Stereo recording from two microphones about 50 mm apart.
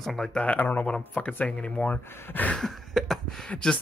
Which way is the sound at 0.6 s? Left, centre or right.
Left.